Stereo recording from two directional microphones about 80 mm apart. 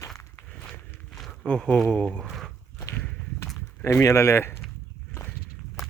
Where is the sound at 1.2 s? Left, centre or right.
Centre.